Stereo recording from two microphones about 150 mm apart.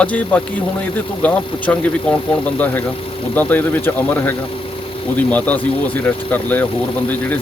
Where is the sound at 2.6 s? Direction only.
10° left (ahead or behind).